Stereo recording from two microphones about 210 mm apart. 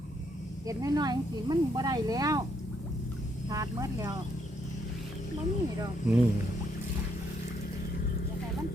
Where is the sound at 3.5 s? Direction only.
15° right (ahead or behind).